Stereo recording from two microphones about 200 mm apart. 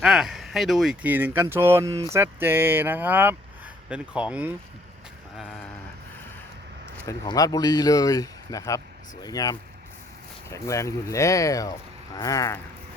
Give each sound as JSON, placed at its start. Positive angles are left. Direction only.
{"t": 0.0, "sound": "speech", "side_deg": -5}
{"t": 7.0, "sound": "speech", "side_deg": 20}